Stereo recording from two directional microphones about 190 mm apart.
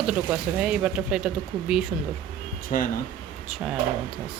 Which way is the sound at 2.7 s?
45° left (ahead or behind).